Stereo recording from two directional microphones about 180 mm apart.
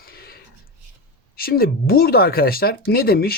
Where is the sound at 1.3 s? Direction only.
55° left (ahead or behind).